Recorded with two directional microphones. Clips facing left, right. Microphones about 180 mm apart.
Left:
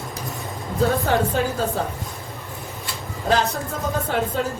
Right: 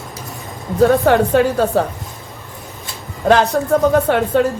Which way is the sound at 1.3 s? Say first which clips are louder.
Right 9 dB; 70° right (ahead or behind).